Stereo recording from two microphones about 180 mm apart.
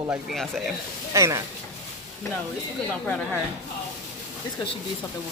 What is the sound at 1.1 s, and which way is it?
Speech, 15° right (ahead or behind).